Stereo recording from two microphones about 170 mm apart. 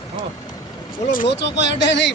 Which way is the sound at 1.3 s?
90° left.